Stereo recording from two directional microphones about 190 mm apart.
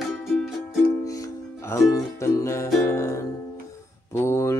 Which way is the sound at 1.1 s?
15° left (ahead or behind).